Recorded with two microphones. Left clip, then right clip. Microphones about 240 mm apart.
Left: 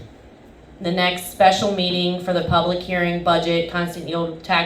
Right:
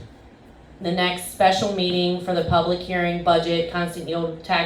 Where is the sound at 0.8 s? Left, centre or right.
Left.